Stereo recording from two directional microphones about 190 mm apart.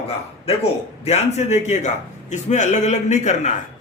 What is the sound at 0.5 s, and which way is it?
A man's voice, 30° left (ahead or behind).